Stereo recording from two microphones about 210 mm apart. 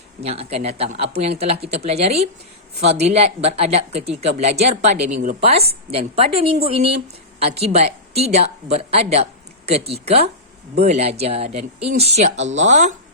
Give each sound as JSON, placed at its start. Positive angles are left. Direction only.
{"t": 0.2, "sound": "a woman's voice", "side_deg": -30}